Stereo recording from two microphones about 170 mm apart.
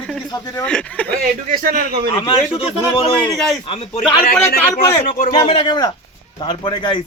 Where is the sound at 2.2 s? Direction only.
35° left (ahead or behind).